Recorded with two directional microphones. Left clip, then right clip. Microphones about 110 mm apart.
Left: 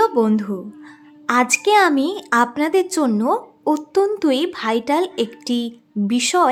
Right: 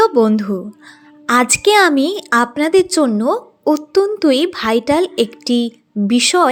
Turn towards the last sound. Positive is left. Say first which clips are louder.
# right 4 dB
turn(degrees=-30)  # may be behind; listen again after turning